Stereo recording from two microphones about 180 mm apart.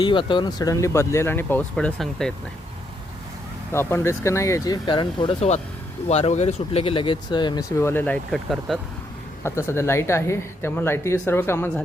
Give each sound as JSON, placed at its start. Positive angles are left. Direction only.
{"t": 0.0, "sound": "speech", "side_deg": 25}
{"t": 3.7, "sound": "speech", "side_deg": 15}
{"t": 9.4, "sound": "speech", "side_deg": 15}